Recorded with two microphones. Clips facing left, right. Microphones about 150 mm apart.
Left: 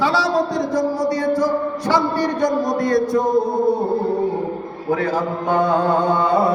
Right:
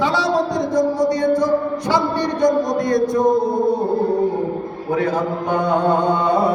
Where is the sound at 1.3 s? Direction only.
15° right (ahead or behind).